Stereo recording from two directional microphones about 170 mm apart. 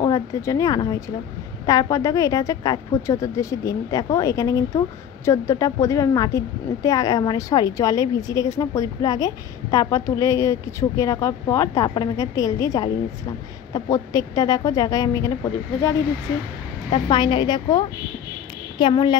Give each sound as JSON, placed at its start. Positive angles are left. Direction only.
{"t": 0.0, "sound": "speech", "side_deg": 20}
{"t": 16.9, "sound": "speech", "side_deg": 25}